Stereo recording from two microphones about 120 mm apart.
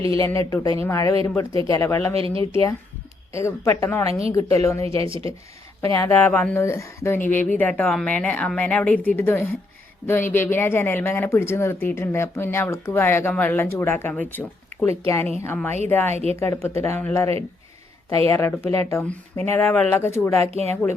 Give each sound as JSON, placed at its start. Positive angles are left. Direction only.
{"t": 0.1, "sound": "speech", "side_deg": 25}
{"t": 2.1, "sound": "speech", "side_deg": -50}
{"t": 2.4, "sound": "speech", "side_deg": 20}
{"t": 5.0, "sound": "speech", "side_deg": -45}
{"t": 5.8, "sound": "a woman's voice", "side_deg": 20}
{"t": 18.3, "sound": "a woman's voice", "side_deg": 15}
{"t": 20.4, "sound": "speech", "side_deg": -60}